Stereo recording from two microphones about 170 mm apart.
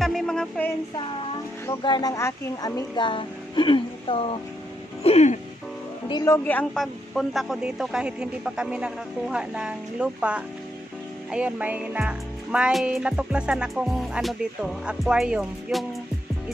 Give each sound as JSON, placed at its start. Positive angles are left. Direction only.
{"t": 0.0, "sound": "music", "side_deg": 5}
{"t": 1.7, "sound": "speech", "side_deg": 25}
{"t": 3.0, "sound": "speech", "side_deg": 30}
{"t": 6.0, "sound": "music", "side_deg": 20}